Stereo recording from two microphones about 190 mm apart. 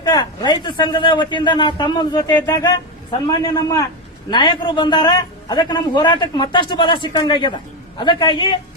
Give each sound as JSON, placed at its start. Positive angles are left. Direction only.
{"t": 0.0, "sound": "speech", "side_deg": 20}